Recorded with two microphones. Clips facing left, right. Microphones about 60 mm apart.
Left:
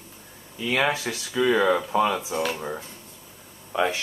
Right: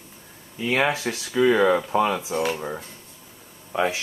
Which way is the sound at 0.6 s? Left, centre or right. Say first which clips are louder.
Right 1 dB; right.